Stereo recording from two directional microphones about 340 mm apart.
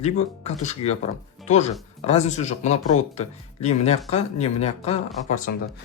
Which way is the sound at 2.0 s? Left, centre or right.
Centre.